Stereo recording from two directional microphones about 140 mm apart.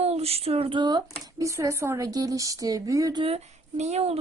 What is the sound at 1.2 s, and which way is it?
A woman's voice, 20° right (ahead or behind).